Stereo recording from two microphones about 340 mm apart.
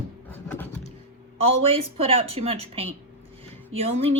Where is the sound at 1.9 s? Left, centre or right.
Centre.